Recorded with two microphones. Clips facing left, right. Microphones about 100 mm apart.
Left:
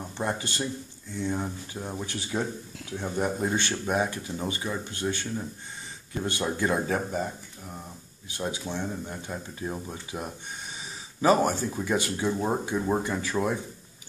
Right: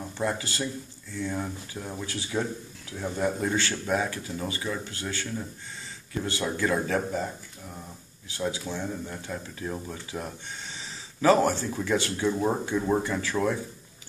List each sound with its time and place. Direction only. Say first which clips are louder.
0.2 s speech: right 1 dB; 20° left (ahead or behind)
6.2 s speech: left 1 dB; 20° left (ahead or behind)
8.3 s speech: right 1 dB; 20° left (ahead or behind)